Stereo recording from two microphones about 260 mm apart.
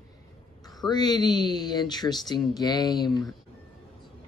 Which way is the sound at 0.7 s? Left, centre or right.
Centre.